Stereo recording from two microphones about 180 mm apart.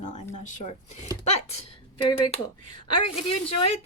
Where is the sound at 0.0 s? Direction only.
40° left (ahead or behind).